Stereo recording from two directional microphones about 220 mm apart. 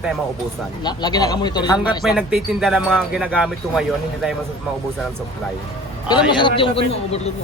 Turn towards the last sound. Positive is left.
turn(degrees=25)  # may be behind; listen again after turning